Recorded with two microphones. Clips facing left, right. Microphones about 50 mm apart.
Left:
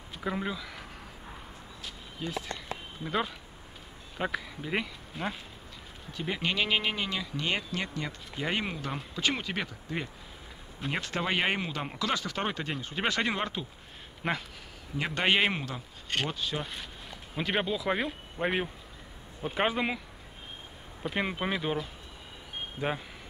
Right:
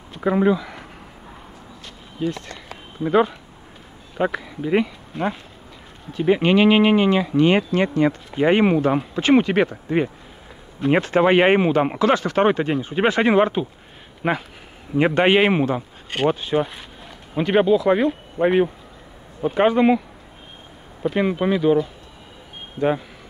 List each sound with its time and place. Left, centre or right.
0.2 s speech: centre
2.2 s speech: centre
2.5 s a sound: centre
4.2 s speech: centre
6.2 s speech: right
12.6 s speech: centre
14.2 s speech: centre
15.0 s speech: right
17.3 s speech: centre
21.0 s speech: centre